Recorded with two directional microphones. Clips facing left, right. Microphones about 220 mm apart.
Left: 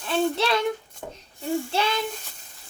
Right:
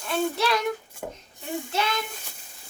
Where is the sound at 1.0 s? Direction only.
10° right (ahead or behind).